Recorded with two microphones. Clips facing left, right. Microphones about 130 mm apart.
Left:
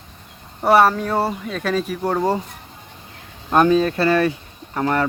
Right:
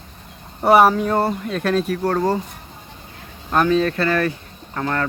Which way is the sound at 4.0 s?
30° left (ahead or behind).